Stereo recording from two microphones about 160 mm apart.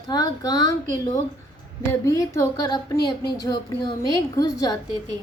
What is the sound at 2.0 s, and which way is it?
Speech, 20° left (ahead or behind).